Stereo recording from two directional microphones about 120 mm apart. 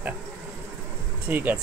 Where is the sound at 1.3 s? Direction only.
15° right (ahead or behind).